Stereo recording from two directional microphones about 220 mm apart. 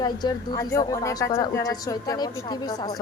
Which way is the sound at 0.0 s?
20° left (ahead or behind).